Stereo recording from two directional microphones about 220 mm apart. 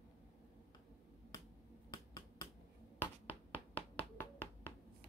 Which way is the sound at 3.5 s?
5° left (ahead or behind).